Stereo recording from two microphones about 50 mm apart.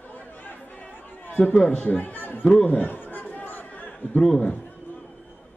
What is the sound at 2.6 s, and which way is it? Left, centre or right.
Chatter, left.